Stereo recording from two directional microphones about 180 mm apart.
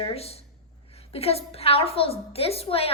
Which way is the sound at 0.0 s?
35° left (ahead or behind).